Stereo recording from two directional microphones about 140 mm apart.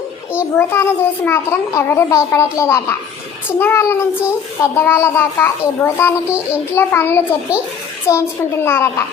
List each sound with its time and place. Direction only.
0.5 s a child's voice: 15° left (ahead or behind)
3.6 s child singing: 15° left (ahead or behind)
4.6 s a child's voice: 20° left (ahead or behind)
6.7 s child singing: 15° left (ahead or behind)
8.1 s a child's voice: 20° left (ahead or behind)
8.6 s child singing: 20° left (ahead or behind)